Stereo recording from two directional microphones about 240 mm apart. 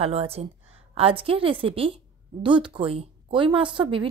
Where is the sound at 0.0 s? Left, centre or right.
Right.